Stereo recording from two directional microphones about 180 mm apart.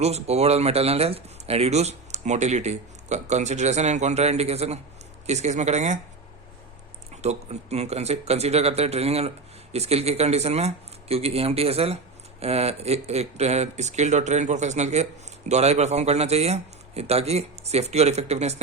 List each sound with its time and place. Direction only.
0.0 s speech: 35° right (ahead or behind)
7.2 s speech: 35° right (ahead or behind)